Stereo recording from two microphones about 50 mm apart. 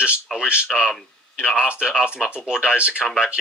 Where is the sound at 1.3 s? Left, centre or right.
Centre.